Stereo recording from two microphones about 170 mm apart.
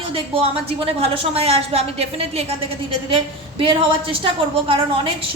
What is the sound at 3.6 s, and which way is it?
A woman's voice, 30° right (ahead or behind).